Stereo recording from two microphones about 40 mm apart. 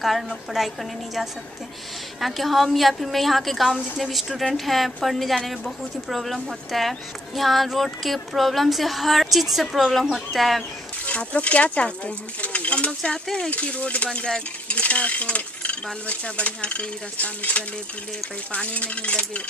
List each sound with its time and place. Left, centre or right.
0.0 s speech: centre
2.1 s speech: centre
11.1 s cutlery: left
12.4 s bird: left
13.0 s speech: centre
13.5 s cutlery: left
14.0 s speech: left
14.8 s cutlery: left